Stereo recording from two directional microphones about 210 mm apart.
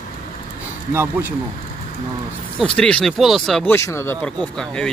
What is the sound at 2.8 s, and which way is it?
Speech, 5° left (ahead or behind).